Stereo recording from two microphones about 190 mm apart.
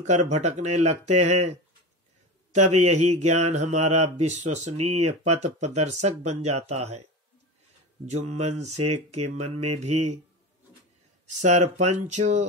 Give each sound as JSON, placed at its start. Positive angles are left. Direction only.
{"t": 0.0, "sound": "speech", "side_deg": -40}
{"t": 2.5, "sound": "speech", "side_deg": -35}
{"t": 8.0, "sound": "speech", "side_deg": -35}
{"t": 11.4, "sound": "speech", "side_deg": -35}